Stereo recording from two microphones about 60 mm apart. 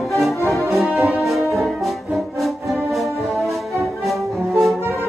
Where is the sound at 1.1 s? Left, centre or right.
Centre.